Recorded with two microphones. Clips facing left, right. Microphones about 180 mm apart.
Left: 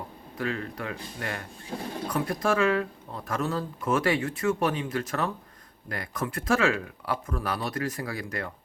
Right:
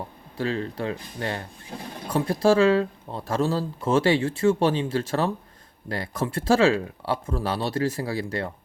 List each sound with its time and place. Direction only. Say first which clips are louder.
0.3 s speech: right 4 dB; 30° right (ahead or behind)